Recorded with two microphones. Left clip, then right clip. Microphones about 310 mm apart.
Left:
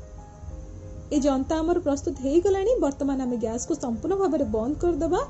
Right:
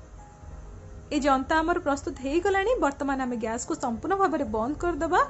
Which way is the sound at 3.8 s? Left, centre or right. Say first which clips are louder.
Right 1 dB; centre.